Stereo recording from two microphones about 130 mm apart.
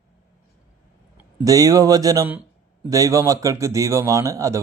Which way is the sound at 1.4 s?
25° right (ahead or behind).